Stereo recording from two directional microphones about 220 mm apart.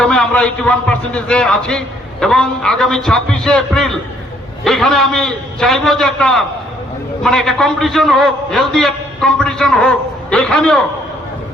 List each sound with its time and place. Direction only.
0.0 s a man's voice: 5° left (ahead or behind)